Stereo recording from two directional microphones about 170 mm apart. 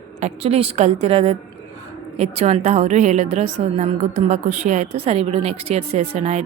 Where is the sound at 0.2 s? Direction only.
40° right (ahead or behind).